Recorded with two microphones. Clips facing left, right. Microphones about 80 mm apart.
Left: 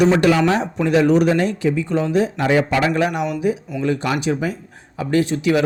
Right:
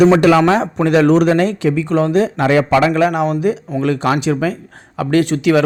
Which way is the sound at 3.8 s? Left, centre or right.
Right.